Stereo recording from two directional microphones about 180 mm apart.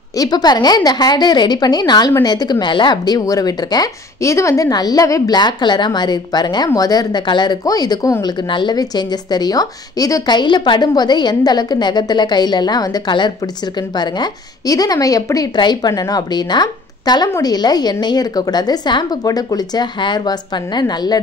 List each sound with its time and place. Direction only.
0.2 s speech: 20° left (ahead or behind)